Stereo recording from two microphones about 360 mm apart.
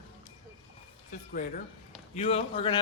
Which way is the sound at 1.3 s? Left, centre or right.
Left.